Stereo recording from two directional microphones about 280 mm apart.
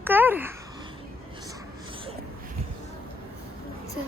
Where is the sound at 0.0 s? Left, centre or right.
Centre.